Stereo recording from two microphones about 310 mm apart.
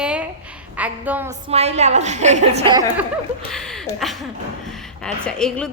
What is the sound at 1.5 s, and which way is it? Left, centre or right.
A woman's voice, right.